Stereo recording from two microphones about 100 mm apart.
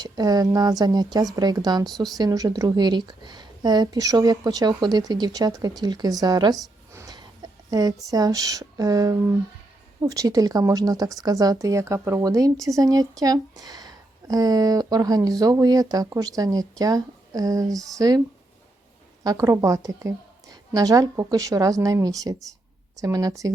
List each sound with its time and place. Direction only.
0.0 s a woman's voice: 40° right (ahead or behind)
6.9 s a sound: 35° right (ahead or behind)
8.1 s speech: 40° right (ahead or behind)
12.2 s speech: 35° right (ahead or behind)
19.2 s speech: 40° right (ahead or behind)